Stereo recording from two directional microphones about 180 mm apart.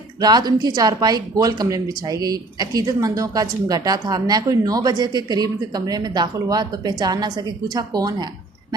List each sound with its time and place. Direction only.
0.2 s speech: 25° right (ahead or behind)